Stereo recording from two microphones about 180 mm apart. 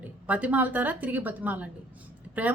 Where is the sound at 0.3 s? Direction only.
10° right (ahead or behind).